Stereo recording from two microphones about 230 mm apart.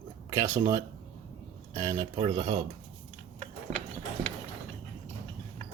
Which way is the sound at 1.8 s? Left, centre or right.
Centre.